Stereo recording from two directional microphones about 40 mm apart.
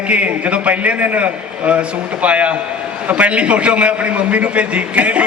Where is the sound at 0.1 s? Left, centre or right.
Right.